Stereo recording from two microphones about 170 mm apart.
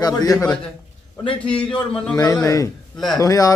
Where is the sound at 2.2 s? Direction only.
20° left (ahead or behind).